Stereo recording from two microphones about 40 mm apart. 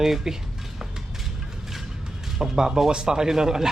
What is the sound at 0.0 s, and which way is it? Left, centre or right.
Speech, centre.